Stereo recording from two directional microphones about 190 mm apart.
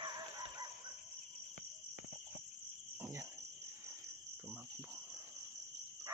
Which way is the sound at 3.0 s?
15° right (ahead or behind).